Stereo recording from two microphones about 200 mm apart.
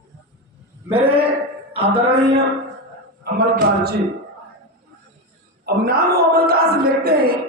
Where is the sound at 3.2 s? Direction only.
55° right (ahead or behind).